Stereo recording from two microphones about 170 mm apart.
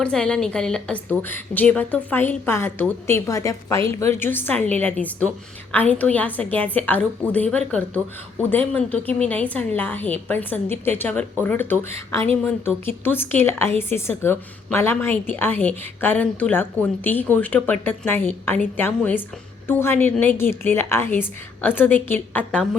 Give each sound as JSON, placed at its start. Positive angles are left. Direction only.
{"t": 0.0, "sound": "a woman's voice", "side_deg": 5}